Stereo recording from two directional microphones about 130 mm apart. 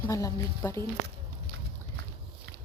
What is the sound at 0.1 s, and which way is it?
Speech, 25° left (ahead or behind).